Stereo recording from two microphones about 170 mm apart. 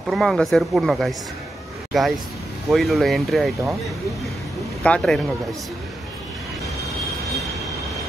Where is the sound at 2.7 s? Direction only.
Centre (ahead or behind).